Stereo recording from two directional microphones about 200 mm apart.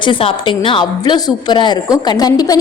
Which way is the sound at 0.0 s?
25° left (ahead or behind).